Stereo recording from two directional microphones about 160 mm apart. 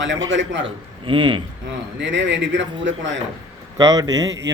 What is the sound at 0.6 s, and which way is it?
Speech, 30° right (ahead or behind).